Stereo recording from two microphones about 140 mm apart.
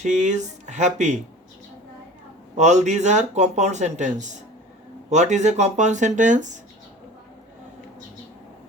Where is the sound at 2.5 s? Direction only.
55° right (ahead or behind).